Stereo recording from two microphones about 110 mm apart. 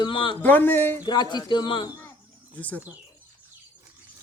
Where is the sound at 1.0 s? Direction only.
40° left (ahead or behind).